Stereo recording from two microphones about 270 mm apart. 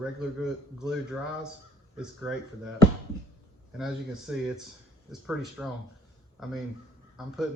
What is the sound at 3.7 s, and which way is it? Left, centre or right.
A man's voice, centre.